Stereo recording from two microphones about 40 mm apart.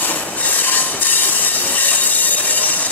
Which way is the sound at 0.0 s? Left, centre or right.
Left.